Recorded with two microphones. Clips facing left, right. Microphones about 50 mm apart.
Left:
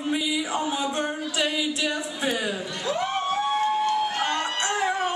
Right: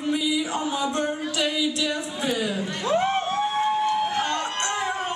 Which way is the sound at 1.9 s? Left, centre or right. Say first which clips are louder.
Even; centre.